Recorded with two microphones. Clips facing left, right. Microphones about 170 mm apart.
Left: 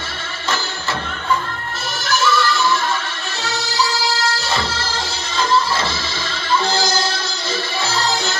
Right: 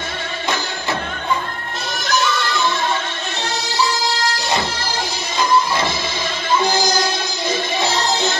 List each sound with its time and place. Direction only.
2.0 s music: 20° right (ahead or behind)
5.4 s music: 15° right (ahead or behind)